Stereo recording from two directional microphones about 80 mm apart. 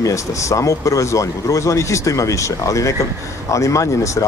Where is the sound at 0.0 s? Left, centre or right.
Left.